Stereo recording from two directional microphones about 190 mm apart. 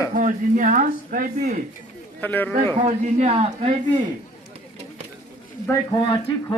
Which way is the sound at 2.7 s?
40° right (ahead or behind).